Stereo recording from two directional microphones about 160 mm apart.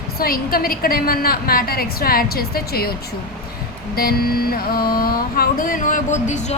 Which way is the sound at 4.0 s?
70° left (ahead or behind).